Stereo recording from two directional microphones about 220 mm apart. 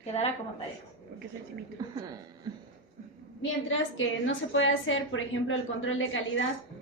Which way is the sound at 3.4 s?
60° left (ahead or behind).